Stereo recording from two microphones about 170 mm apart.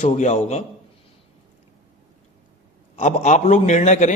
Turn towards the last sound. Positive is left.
turn(degrees=45)  # may be behind; listen again after turning